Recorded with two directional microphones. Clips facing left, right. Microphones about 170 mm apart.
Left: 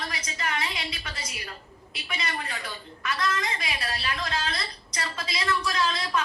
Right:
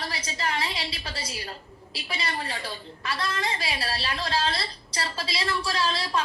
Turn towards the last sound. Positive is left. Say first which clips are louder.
# even
turn(degrees=-30)  # may be behind; listen again after turning